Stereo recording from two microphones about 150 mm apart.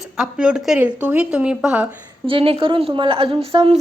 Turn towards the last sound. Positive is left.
turn(degrees=-40)  # may be behind; listen again after turning